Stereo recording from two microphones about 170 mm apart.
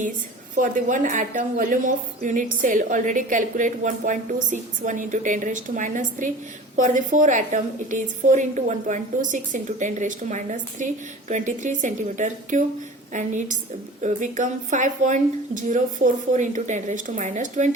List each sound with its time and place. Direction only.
0.5 s a woman's voice: 50° right (ahead or behind)